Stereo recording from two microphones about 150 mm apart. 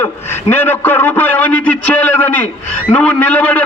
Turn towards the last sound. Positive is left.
turn(degrees=10)  # may be behind; listen again after turning